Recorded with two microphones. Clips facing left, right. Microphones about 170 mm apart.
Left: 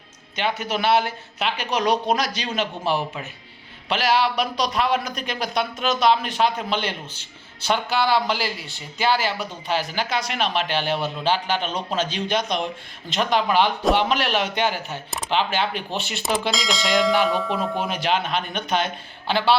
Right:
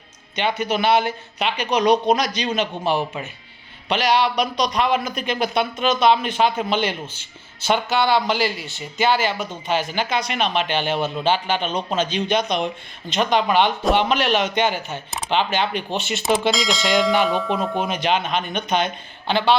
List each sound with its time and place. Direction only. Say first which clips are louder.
0.3 s speech: right 3 dB; centre (ahead or behind)